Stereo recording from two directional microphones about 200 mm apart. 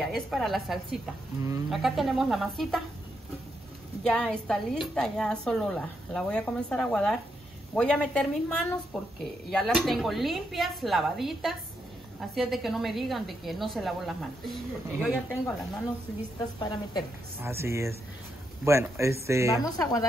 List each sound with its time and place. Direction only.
0.0 s a woman's voice: centre (ahead or behind)
4.0 s a woman's voice: 5° left (ahead or behind)
16.5 s a woman's voice: 20° left (ahead or behind)
17.4 s speech: 10° right (ahead or behind)
19.5 s speech: 15° left (ahead or behind)